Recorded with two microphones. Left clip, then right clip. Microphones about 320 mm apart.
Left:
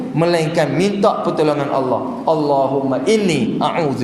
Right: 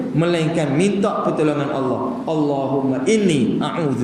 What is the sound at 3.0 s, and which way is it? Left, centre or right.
Speech, centre.